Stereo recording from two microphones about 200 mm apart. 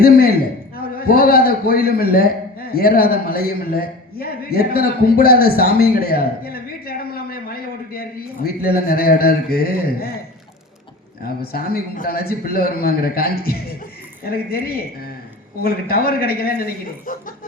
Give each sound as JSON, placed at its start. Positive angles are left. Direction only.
{"t": 0.0, "sound": "a man's voice", "side_deg": 50}
{"t": 11.5, "sound": "a man's voice", "side_deg": 50}